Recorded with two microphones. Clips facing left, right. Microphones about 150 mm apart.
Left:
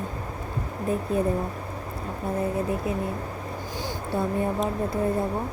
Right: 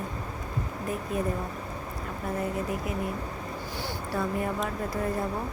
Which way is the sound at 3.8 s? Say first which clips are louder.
Left 3 dB; 25° left (ahead or behind).